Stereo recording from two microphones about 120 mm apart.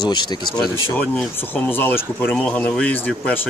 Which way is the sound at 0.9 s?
15° left (ahead or behind).